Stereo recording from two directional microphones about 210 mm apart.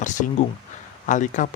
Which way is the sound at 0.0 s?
35° left (ahead or behind).